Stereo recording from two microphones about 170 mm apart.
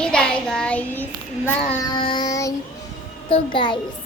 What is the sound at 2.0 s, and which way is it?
A child's voice, 30° left (ahead or behind).